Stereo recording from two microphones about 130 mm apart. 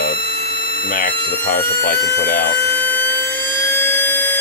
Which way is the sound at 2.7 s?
15° left (ahead or behind).